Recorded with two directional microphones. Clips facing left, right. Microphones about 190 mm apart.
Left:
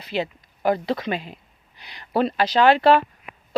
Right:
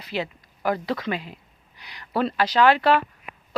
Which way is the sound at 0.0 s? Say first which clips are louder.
Left 3 dB; 25° left (ahead or behind).